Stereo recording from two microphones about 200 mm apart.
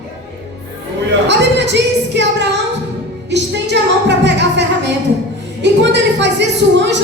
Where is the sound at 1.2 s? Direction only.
60° right (ahead or behind).